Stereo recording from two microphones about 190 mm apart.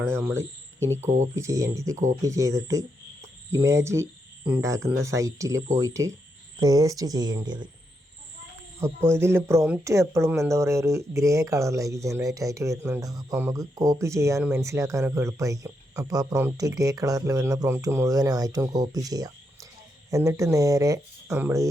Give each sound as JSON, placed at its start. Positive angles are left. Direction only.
{"t": 0.0, "sound": "speech", "side_deg": -15}
{"t": 1.0, "sound": "speech", "side_deg": -40}
{"t": 1.4, "sound": "speech", "side_deg": -15}
{"t": 8.8, "sound": "speech", "side_deg": -15}